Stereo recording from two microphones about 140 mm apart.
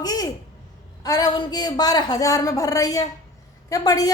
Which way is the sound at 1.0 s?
25° left (ahead or behind).